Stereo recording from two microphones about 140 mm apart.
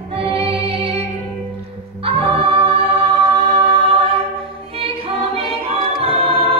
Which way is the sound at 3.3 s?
40° right (ahead or behind).